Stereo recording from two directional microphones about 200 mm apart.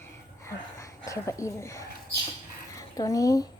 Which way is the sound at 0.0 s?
15° left (ahead or behind).